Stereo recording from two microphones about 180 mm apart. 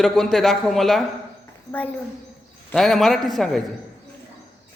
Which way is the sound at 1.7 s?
35° left (ahead or behind).